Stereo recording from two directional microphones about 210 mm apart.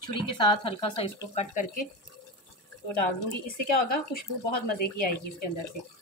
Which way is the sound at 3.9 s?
45° left (ahead or behind).